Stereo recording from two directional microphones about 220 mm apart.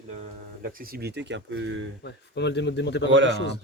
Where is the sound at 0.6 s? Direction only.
40° right (ahead or behind); by 1.9 s 60° right (ahead or behind).